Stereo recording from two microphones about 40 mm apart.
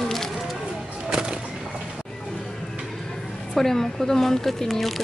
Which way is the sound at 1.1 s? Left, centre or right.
Centre.